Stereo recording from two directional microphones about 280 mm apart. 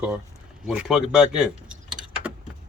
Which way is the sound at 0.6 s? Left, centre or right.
Centre.